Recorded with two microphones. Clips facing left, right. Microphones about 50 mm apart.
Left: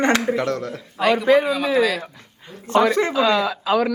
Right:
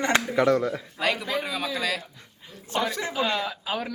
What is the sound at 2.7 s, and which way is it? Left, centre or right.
Speech, left.